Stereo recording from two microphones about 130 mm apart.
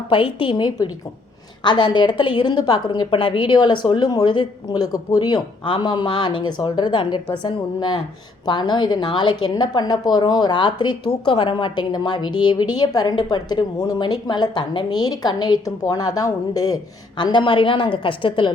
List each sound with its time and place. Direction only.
0.1 s a woman's voice: 40° left (ahead or behind)